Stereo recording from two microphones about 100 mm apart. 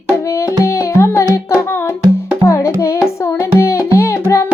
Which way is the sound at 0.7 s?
25° left (ahead or behind).